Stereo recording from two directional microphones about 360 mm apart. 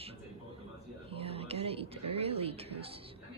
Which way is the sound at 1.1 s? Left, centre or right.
Centre.